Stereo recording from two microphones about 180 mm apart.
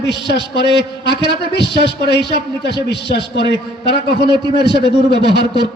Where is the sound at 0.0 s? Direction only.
70° left (ahead or behind).